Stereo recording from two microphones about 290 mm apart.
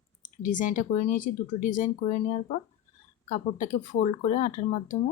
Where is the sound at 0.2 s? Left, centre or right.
Left.